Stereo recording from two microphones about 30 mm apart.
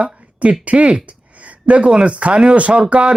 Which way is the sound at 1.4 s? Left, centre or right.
Right.